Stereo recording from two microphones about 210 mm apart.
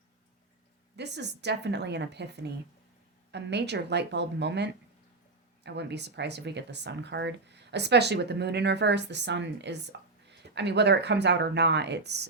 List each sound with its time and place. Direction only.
0.9 s a woman's voice: 55° right (ahead or behind)